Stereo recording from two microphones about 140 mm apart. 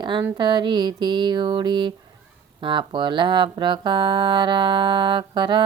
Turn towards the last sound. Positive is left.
turn(degrees=-35)  # may be behind; listen again after turning